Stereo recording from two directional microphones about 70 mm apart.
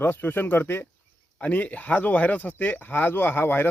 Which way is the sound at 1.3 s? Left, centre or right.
Centre.